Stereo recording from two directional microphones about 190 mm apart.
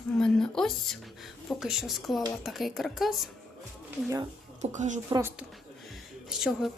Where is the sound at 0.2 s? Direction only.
5° left (ahead or behind).